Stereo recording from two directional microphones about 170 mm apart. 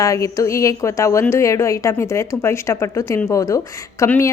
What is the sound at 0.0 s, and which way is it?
A woman's voice, 20° left (ahead or behind).